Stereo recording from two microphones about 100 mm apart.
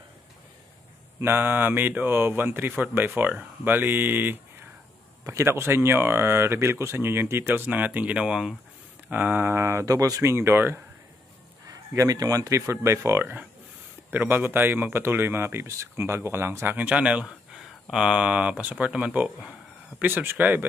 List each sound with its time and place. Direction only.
1.2 s speech: 20° right (ahead or behind); by 8.5 s 5° right (ahead or behind)
9.1 s speech: 15° right (ahead or behind)
11.6 s speech: 35° right (ahead or behind); by 20.6 s 20° right (ahead or behind)